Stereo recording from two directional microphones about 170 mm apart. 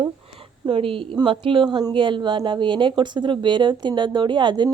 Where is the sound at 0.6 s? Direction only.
30° right (ahead or behind).